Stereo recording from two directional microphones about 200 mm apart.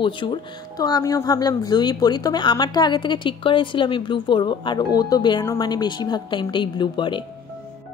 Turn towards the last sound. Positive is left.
turn(degrees=25)  # may be behind; listen again after turning